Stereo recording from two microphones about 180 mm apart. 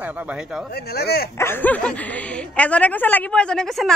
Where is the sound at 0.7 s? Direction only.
60° left (ahead or behind).